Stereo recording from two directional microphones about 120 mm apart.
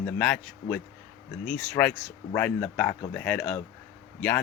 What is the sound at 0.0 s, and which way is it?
Speech, 10° left (ahead or behind).